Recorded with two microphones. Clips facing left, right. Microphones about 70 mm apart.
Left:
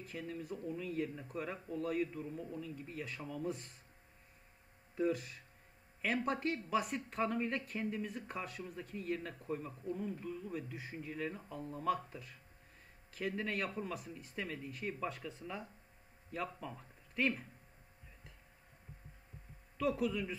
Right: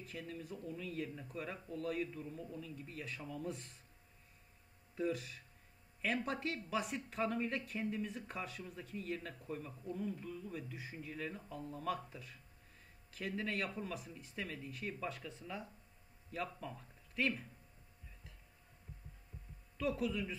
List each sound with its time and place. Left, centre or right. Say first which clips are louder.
0.0 s a man's voice: left 3 dB; centre
3.0 s speech: left 3 dB; centre
4.9 s speech: left 3 dB; centre
9.5 s a man's voice: left 4 dB; centre
10.5 s a man's voice: left 3 dB; centre
13.4 s speech: right 1 dB; centre
16.4 s a man's voice: left 1 dB; centre
19.8 s speech: left 2 dB; centre